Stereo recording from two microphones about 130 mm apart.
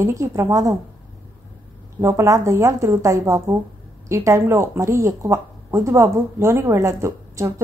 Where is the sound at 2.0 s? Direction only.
20° right (ahead or behind).